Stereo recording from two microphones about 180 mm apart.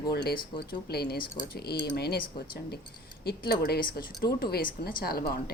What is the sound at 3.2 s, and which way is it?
A woman's voice, 60° left (ahead or behind).